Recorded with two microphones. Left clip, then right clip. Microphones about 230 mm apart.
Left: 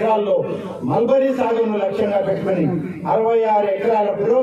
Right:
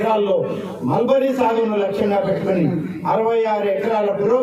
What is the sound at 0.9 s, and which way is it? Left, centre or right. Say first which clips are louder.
Speech: left 1 dB; right.